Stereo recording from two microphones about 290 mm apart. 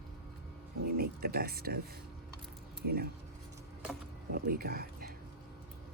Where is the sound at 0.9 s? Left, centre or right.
Right.